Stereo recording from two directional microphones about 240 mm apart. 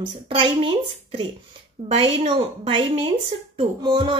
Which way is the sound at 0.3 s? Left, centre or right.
Right.